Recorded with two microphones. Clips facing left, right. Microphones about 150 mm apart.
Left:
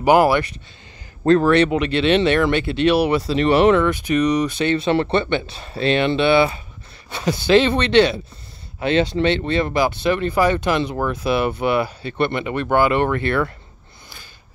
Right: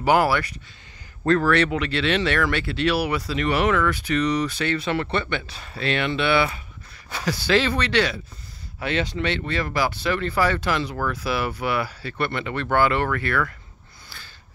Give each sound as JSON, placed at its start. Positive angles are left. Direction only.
{"t": 0.0, "sound": "speech", "side_deg": 20}